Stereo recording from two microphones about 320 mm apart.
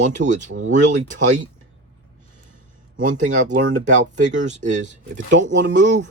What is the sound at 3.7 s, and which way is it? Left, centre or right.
Speech, right.